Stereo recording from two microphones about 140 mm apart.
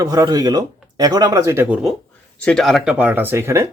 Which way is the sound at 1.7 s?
5° right (ahead or behind).